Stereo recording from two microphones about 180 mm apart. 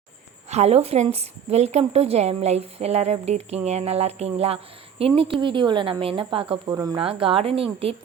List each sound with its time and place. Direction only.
0.5 s a woman's voice: 35° right (ahead or behind)
6.7 s speech: 20° right (ahead or behind)
7.0 s a woman's voice: 30° right (ahead or behind)